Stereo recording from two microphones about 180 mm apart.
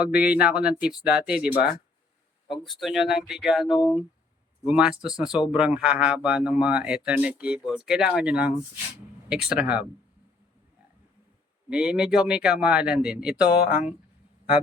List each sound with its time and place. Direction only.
0.0 s a man's voice: 5° right (ahead or behind)
11.7 s a man's voice: 5° right (ahead or behind)